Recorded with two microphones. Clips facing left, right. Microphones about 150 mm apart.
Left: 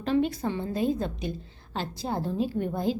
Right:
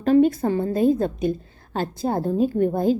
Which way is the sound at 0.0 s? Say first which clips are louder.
Right 9 dB; 50° right (ahead or behind).